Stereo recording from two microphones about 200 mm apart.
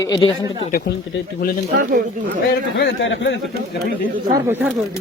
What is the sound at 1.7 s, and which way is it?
Speech, 40° right (ahead or behind).